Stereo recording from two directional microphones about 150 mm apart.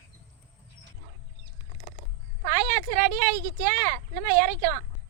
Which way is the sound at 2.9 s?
70° right (ahead or behind).